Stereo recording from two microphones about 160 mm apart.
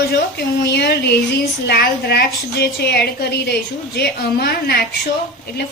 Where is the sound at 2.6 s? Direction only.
85° left; by 4.8 s 65° left (ahead or behind).